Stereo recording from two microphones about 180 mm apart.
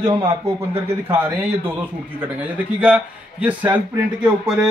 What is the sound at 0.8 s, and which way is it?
A man's voice, 10° right (ahead or behind).